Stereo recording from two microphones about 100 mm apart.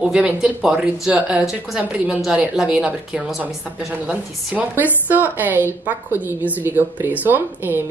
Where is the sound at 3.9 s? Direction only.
15° right (ahead or behind).